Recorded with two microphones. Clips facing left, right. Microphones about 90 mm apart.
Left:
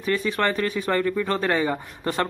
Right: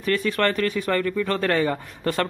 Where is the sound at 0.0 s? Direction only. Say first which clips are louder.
Right 1 dB; 20° left (ahead or behind).